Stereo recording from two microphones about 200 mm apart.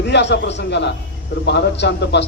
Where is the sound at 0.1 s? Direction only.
60° left (ahead or behind).